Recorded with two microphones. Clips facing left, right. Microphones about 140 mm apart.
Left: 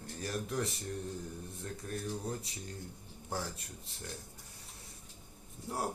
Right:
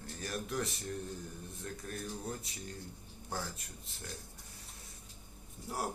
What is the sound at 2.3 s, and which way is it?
Speech, 30° left (ahead or behind).